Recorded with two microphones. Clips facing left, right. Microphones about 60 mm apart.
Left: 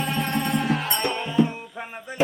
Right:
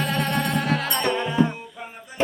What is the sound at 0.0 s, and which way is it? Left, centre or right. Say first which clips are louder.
Music: right 1 dB; right.